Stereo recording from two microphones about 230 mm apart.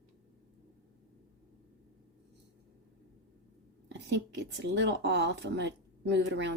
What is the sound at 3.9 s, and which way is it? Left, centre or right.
A woman's voice, right.